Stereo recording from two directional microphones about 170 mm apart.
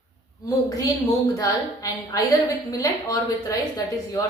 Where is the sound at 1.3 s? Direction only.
20° left (ahead or behind).